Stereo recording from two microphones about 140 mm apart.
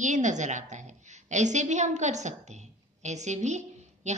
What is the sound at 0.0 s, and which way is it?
A woman's voice, 60° right (ahead or behind).